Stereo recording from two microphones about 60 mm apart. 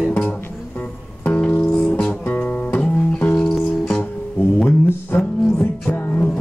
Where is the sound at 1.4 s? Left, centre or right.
Left.